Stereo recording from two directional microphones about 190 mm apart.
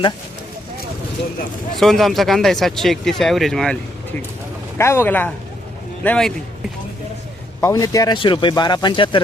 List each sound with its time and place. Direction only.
1.7 s speech: centre (ahead or behind)
4.8 s speech: 15° left (ahead or behind)
7.6 s speech: 20° left (ahead or behind)